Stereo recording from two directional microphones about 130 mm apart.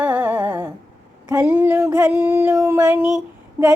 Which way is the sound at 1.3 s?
10° right (ahead or behind).